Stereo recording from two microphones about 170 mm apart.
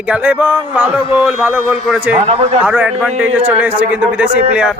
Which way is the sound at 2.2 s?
35° right (ahead or behind).